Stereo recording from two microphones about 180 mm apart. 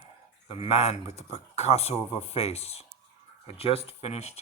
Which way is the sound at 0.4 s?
35° left (ahead or behind).